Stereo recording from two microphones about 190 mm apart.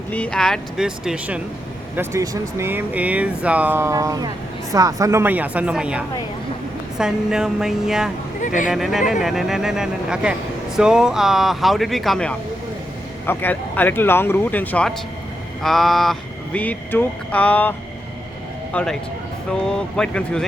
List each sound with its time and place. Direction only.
0.1 s speech: 5° left (ahead or behind)
2.0 s speech: 15° right (ahead or behind)
8.4 s speech: 45° left (ahead or behind)
8.7 s speech: centre (ahead or behind)